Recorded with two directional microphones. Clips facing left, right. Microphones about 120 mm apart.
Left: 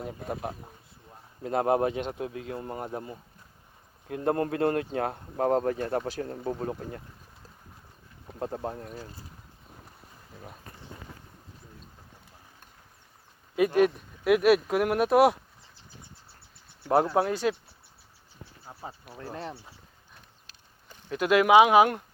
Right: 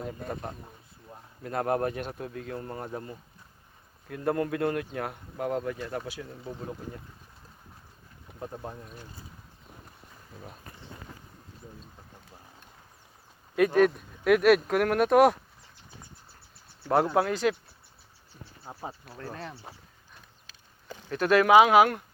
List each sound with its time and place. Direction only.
0.0 s speech: 5° left (ahead or behind)
1.4 s speech: 25° left (ahead or behind)
4.1 s speech: 25° left (ahead or behind)
5.4 s speech: 40° left (ahead or behind)
8.4 s speech: 35° left (ahead or behind)
13.7 s speech: 5° left (ahead or behind)
16.8 s speech: 15° left (ahead or behind)
18.6 s speech: 20° right (ahead or behind)
19.0 s speech: 20° left (ahead or behind)
21.1 s speech: 10° left (ahead or behind)